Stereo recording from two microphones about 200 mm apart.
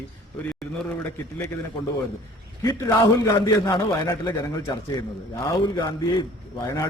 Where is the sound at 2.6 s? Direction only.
15° left (ahead or behind).